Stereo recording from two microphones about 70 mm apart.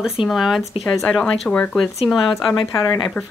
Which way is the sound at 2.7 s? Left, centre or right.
Left.